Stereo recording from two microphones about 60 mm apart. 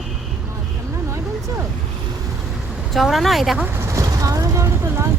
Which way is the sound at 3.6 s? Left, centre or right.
Right.